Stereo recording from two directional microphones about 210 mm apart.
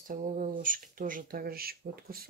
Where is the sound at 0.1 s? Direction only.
40° right (ahead or behind).